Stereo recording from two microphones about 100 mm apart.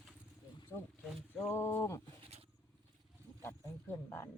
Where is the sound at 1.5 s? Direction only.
25° left (ahead or behind).